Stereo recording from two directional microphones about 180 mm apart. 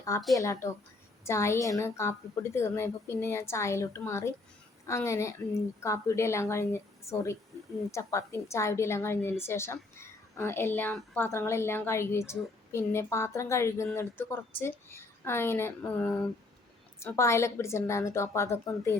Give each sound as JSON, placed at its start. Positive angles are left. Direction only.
{"t": 0.3, "sound": "a woman's voice", "side_deg": 15}